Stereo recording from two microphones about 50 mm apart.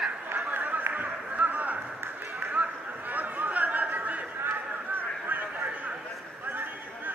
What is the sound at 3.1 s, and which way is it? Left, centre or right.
Chatter, right.